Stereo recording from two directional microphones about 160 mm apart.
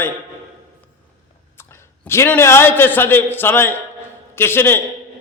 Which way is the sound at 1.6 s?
15° left (ahead or behind).